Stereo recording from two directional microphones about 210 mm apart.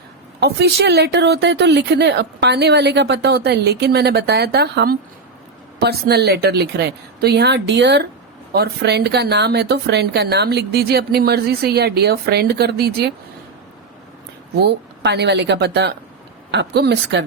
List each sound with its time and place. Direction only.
0.3 s speech: 50° right (ahead or behind)
14.6 s speech: 55° right (ahead or behind)